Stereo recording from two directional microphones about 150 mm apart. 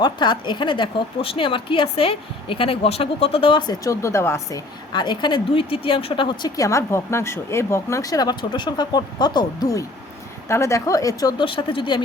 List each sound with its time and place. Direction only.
0.0 s a woman's voice: 30° left (ahead or behind)